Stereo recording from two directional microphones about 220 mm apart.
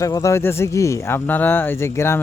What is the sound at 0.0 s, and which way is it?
Speech, 15° left (ahead or behind).